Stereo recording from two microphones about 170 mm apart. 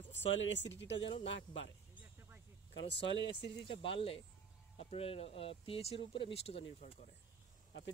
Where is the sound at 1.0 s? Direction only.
35° left (ahead or behind).